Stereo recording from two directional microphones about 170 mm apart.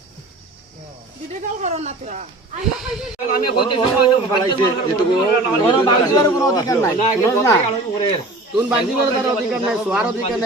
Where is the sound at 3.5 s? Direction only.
30° left (ahead or behind).